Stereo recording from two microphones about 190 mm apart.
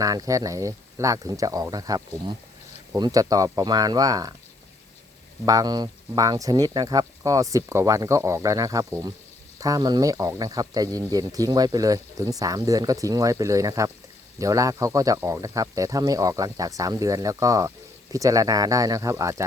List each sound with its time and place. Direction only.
0.0 s speech: 20° right (ahead or behind)
5.5 s speech: 20° right (ahead or behind)